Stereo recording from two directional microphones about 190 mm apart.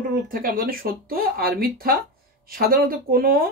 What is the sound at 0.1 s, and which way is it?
Speech, 50° right (ahead or behind).